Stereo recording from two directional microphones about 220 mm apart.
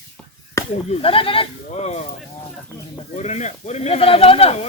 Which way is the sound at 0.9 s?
25° left (ahead or behind).